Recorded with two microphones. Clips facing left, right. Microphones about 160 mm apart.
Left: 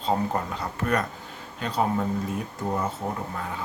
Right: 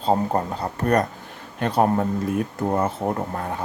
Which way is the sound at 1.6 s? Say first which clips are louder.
Right 6 dB; 55° right (ahead or behind).